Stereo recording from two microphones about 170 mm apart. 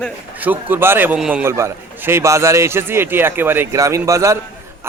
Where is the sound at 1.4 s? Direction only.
15° right (ahead or behind).